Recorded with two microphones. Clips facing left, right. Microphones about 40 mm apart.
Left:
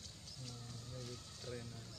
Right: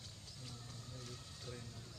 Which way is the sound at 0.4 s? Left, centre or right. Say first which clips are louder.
Left 1 dB; centre.